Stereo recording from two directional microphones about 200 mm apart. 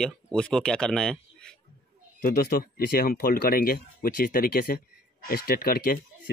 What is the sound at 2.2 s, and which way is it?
Speech, 45° left (ahead or behind).